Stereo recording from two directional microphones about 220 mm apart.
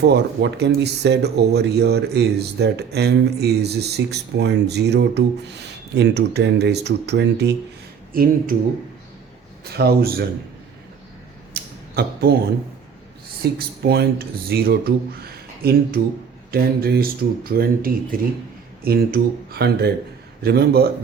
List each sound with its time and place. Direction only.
0.0 s speech: 50° right (ahead or behind)
9.6 s speech: 45° right (ahead or behind)
11.5 s a sound: 45° right (ahead or behind)
13.4 s speech: 45° right (ahead or behind)
16.5 s speech: 45° right (ahead or behind)